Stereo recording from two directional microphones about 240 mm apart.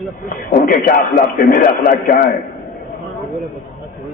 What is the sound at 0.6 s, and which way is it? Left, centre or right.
A man's voice, left.